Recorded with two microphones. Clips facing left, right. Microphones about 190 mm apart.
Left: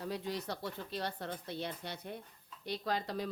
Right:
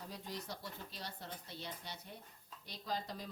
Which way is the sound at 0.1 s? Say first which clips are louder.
Left 8 dB; 70° left (ahead or behind).